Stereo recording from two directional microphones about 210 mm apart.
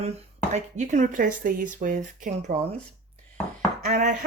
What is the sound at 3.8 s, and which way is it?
Speech, 35° right (ahead or behind).